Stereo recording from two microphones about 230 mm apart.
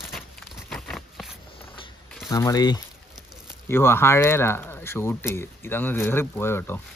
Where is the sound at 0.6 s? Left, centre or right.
Centre.